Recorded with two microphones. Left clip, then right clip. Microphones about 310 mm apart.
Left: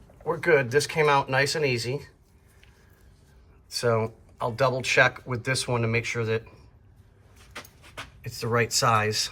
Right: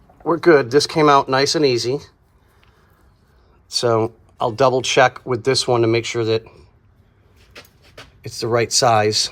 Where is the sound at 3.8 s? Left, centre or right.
Right.